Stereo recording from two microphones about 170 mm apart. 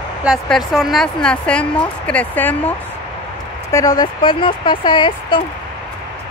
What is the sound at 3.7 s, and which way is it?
Speech, 20° left (ahead or behind).